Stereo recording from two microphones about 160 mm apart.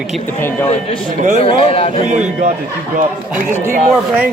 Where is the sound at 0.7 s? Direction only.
40° left (ahead or behind).